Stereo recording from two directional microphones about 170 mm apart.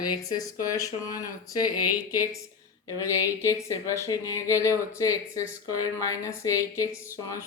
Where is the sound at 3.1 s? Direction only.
15° left (ahead or behind).